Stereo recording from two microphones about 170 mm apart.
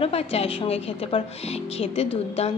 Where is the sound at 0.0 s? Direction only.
35° left (ahead or behind).